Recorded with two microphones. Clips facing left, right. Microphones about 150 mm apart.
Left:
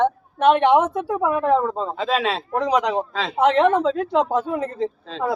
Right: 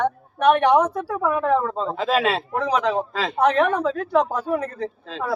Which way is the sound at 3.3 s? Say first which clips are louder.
Left 3 dB; 20° left (ahead or behind).